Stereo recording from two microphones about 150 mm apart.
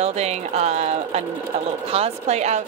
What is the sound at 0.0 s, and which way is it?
Speech, 45° right (ahead or behind).